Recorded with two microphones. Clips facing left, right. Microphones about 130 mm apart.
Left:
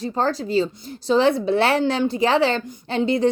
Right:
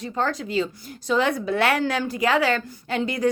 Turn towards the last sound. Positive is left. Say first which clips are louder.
# left 4 dB
turn(degrees=25)  # may be behind; listen again after turning